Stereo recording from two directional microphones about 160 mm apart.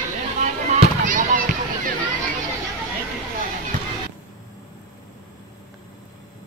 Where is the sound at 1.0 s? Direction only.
55° right (ahead or behind).